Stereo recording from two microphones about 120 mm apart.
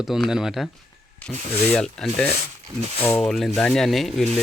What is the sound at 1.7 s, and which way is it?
Speech, 5° left (ahead or behind).